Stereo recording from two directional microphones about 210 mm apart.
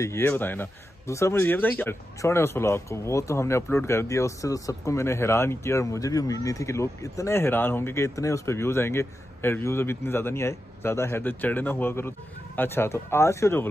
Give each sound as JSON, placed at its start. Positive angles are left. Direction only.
{"t": 0.0, "sound": "speech", "side_deg": 10}